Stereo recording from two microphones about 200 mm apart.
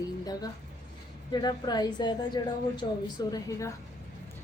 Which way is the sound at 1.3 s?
20° left (ahead or behind).